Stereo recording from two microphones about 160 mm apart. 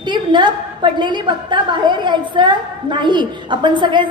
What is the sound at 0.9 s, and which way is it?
A woman's voice, 30° right (ahead or behind).